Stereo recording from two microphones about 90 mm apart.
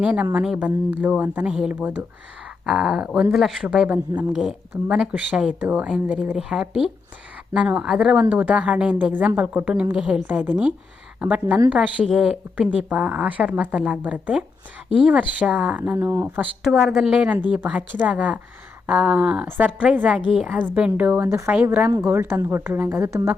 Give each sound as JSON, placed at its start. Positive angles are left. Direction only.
{"t": 0.0, "sound": "a woman's voice", "side_deg": -15}
{"t": 0.9, "sound": "a woman's voice", "side_deg": -20}
{"t": 2.6, "sound": "a woman's voice", "side_deg": -5}
{"t": 3.9, "sound": "a woman's voice", "side_deg": -20}
{"t": 4.3, "sound": "a woman's voice", "side_deg": 0}
{"t": 4.9, "sound": "a woman's voice", "side_deg": -15}
{"t": 16.6, "sound": "a woman's voice", "side_deg": 0}
{"t": 21.2, "sound": "speech", "side_deg": -30}
{"t": 21.5, "sound": "a woman's voice", "side_deg": -20}